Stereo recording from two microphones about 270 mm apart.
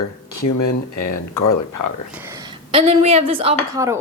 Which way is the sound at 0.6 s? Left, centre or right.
Left.